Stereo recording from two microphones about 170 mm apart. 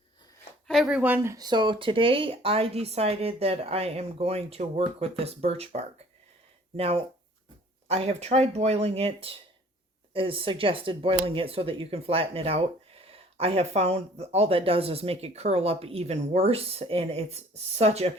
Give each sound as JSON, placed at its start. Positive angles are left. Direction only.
{"t": 0.7, "sound": "speech", "side_deg": 0}